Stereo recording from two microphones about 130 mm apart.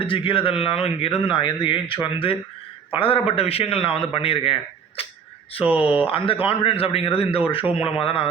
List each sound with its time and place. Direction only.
0.0 s a man's voice: 40° left (ahead or behind)